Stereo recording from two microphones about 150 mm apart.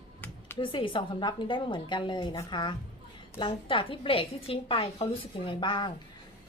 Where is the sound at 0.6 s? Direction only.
35° left (ahead or behind).